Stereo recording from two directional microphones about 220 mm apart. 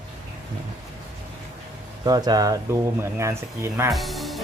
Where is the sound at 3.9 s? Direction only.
Centre (ahead or behind).